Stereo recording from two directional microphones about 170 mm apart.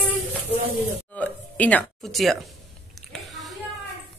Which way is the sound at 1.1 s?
10° left (ahead or behind).